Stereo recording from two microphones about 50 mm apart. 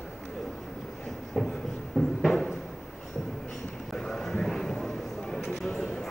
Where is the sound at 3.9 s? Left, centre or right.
Centre.